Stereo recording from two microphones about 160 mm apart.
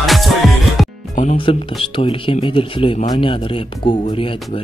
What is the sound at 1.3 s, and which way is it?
Speech, 30° left (ahead or behind).